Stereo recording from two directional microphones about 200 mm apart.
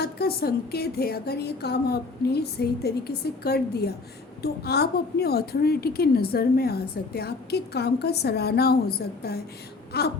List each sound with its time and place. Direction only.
0.0 s a woman's voice: 50° left (ahead or behind)